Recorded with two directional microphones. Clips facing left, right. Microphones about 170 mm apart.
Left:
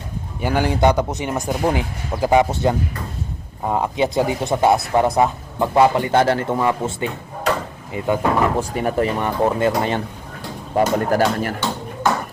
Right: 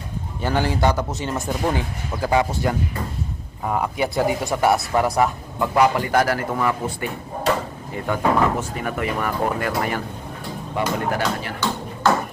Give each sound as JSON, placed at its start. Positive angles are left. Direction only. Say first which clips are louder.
{"t": 0.4, "sound": "speech", "louder": "left 3 dB", "side_deg": 15}
{"t": 8.5, "sound": "speech", "louder": "left 6 dB", "side_deg": 35}
{"t": 10.8, "sound": "speech", "louder": "left 6 dB", "side_deg": 45}